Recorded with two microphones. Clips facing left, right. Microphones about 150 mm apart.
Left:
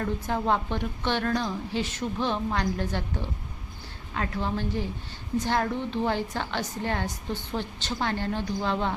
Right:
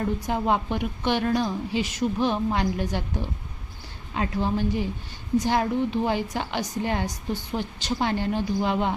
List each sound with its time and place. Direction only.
0.3 s a woman's voice: 15° right (ahead or behind)